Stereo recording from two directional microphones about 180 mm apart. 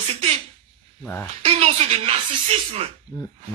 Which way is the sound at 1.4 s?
35° right (ahead or behind).